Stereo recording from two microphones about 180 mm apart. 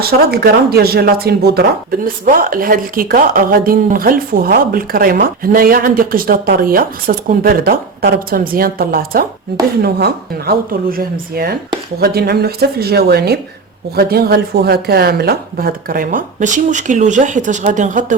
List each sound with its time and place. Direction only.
0.0 s speech: 60° right (ahead or behind)